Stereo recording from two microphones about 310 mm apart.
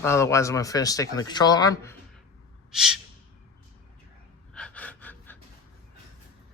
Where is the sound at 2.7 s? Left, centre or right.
Centre.